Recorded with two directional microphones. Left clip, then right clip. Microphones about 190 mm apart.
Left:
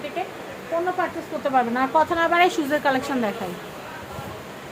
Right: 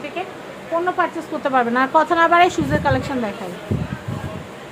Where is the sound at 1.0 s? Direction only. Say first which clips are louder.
Right 4 dB; 25° right (ahead or behind); by 3.3 s centre (ahead or behind).